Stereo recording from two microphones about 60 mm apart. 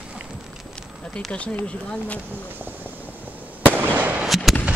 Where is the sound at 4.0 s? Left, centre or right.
Right.